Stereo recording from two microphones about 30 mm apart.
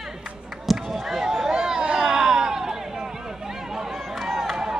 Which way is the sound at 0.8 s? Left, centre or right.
Centre.